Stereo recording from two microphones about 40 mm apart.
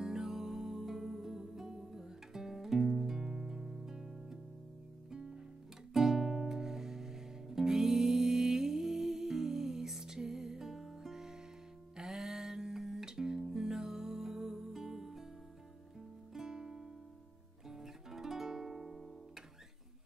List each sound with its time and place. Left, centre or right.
0.0 s music: centre
16.3 s music: centre